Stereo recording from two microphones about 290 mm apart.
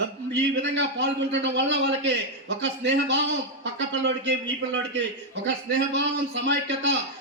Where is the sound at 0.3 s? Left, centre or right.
Right.